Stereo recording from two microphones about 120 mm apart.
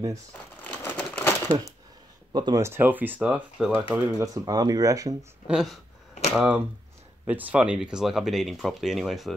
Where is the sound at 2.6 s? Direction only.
15° right (ahead or behind).